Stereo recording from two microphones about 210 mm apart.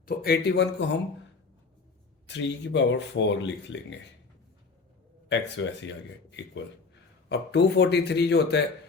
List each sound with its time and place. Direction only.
0.0 s speech: 45° left (ahead or behind)
2.2 s speech: 60° left (ahead or behind)
5.3 s speech: 60° left (ahead or behind)
7.3 s speech: 55° left (ahead or behind)